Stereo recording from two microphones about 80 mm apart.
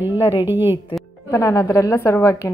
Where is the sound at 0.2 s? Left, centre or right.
Left.